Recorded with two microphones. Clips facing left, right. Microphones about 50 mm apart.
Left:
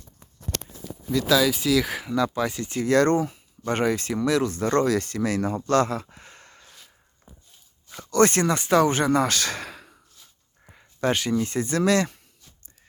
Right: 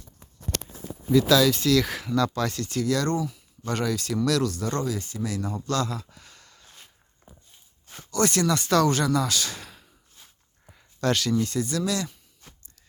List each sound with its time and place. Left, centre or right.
1.3 s speech: centre; by 2.9 s left
2.9 s speech: left
4.9 s speech: left
7.9 s speech: left
8.6 s speech: left
10.7 s speech: left
11.8 s speech: left